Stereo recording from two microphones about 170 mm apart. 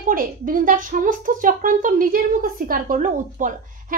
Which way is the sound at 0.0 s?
55° right (ahead or behind).